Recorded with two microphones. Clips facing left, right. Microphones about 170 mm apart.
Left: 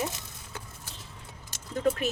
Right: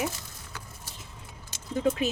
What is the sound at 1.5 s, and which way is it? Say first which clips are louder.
Keys jangling: right 1 dB; 20° right (ahead or behind).